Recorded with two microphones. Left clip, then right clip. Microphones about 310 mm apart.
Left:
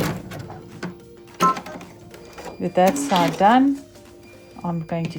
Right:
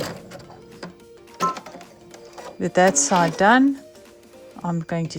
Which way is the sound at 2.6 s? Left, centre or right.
Right.